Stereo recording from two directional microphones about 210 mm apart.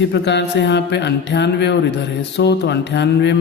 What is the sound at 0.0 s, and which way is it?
Mantra, 55° left (ahead or behind).